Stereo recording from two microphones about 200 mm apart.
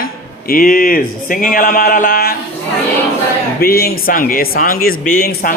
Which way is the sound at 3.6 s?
50° left (ahead or behind).